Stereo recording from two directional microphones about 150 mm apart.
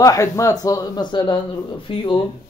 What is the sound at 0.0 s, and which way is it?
Speech, 20° left (ahead or behind).